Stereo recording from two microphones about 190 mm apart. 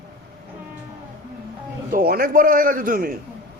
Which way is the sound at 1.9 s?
50° right (ahead or behind).